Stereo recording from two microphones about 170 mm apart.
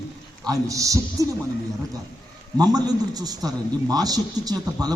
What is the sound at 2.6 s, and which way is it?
A man's voice, 25° right (ahead or behind).